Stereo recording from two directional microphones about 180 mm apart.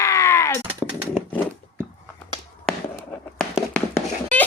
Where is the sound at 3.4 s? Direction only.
Centre (ahead or behind).